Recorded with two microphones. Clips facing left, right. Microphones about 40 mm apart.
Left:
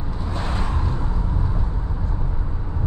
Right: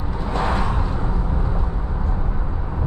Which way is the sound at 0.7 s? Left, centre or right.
Centre.